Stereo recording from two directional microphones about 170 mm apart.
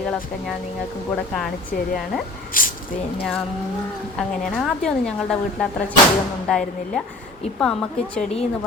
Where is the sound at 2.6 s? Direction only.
55° left (ahead or behind).